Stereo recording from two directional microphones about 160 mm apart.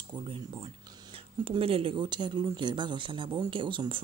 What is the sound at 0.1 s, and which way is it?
Speech, 30° right (ahead or behind).